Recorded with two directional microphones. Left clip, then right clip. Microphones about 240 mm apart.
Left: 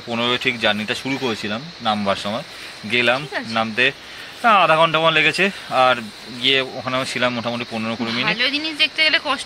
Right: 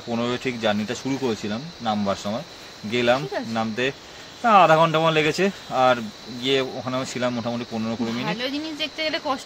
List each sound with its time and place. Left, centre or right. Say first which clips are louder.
0.1 s speech: left 6 dB; centre
8.3 s speech: left 8 dB; right